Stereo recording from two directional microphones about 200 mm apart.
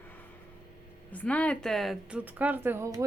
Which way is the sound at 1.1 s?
5° left (ahead or behind).